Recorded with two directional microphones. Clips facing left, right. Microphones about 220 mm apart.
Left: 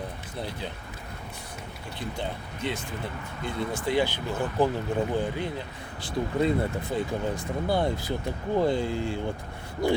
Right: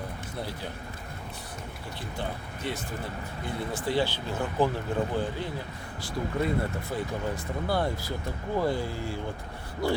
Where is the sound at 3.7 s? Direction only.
15° left (ahead or behind).